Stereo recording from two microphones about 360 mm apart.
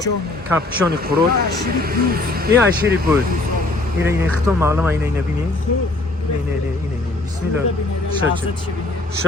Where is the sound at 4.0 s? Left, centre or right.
Centre.